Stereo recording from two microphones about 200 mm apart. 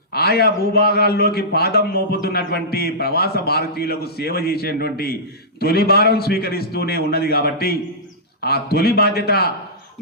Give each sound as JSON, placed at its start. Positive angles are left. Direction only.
{"t": 0.1, "sound": "a man's voice", "side_deg": 50}